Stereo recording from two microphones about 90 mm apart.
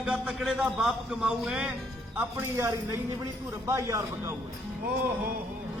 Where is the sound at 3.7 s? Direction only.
30° right (ahead or behind).